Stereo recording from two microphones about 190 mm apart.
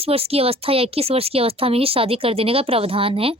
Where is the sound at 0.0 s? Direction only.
30° right (ahead or behind).